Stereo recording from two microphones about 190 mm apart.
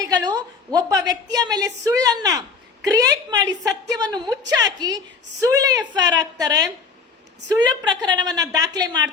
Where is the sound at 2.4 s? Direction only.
20° right (ahead or behind).